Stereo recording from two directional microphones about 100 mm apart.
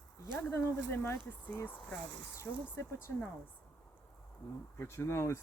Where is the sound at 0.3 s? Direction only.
20° left (ahead or behind).